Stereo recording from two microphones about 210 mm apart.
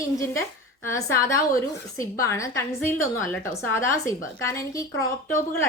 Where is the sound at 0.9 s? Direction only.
15° left (ahead or behind).